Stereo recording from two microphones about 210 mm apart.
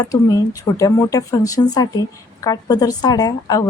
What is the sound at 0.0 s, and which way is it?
Speech, 15° left (ahead or behind).